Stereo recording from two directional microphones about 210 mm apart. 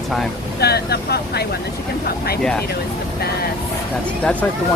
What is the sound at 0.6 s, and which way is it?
Speech, 50° left (ahead or behind).